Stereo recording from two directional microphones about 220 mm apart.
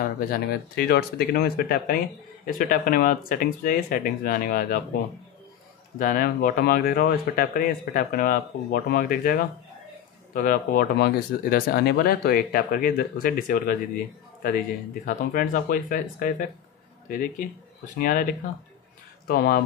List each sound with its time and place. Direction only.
0.3 s speech: 45° left (ahead or behind)
5.9 s speech: 40° left (ahead or behind)
15.0 s speech: 40° left (ahead or behind)